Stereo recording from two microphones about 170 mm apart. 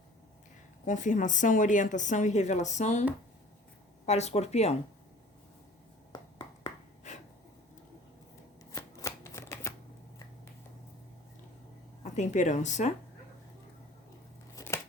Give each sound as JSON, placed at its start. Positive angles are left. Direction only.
{"t": 0.9, "sound": "a woman's voice", "side_deg": 45}
{"t": 6.7, "sound": "writing", "side_deg": 45}
{"t": 8.7, "sound": "shuffling cards", "side_deg": 20}
{"t": 12.0, "sound": "a woman's voice", "side_deg": 45}
{"t": 14.5, "sound": "a sound", "side_deg": 15}